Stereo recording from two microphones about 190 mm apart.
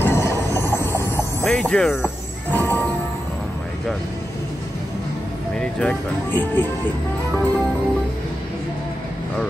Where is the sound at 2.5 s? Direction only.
10° left (ahead or behind).